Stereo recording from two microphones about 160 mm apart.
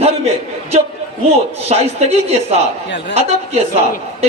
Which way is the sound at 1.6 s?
40° right (ahead or behind).